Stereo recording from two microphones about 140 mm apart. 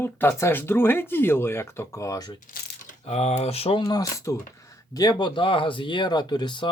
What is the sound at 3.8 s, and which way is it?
Speech, 25° left (ahead or behind).